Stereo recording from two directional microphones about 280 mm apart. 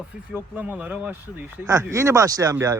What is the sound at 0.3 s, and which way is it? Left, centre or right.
Speech, centre.